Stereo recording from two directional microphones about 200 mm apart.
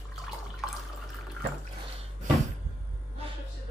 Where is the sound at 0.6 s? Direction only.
Centre (ahead or behind).